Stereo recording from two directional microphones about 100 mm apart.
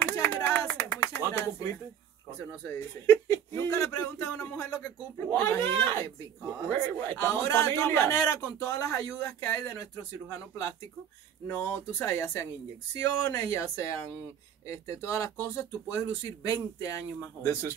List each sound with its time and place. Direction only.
0.0 s a sound: 25° left (ahead or behind)
2.6 s speech: 25° left (ahead or behind)
6.7 s speech: 25° left (ahead or behind)
11.4 s speech: 25° left (ahead or behind)